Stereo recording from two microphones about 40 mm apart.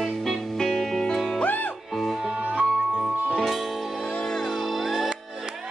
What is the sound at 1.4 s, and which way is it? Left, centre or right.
Music, left.